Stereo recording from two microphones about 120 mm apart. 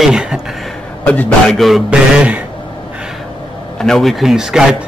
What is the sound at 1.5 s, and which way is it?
Speech, centre (ahead or behind).